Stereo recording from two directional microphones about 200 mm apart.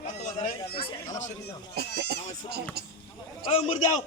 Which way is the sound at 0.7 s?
25° left (ahead or behind).